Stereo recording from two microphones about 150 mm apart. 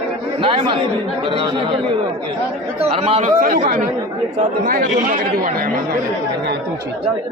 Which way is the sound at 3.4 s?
75° right (ahead or behind).